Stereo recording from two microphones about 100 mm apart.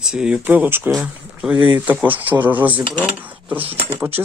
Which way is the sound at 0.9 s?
5° right (ahead or behind).